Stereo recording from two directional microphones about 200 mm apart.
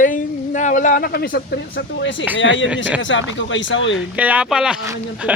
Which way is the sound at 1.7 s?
70° left (ahead or behind).